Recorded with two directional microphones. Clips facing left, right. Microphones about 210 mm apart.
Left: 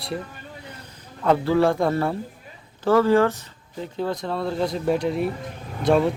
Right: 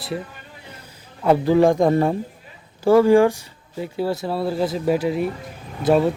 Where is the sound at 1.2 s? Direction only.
15° right (ahead or behind).